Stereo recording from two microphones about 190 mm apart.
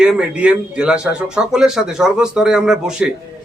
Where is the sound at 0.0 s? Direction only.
5° right (ahead or behind).